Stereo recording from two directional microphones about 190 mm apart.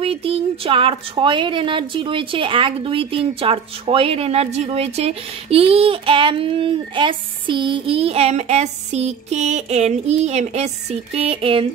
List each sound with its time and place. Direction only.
0.0 s speech: 30° right (ahead or behind)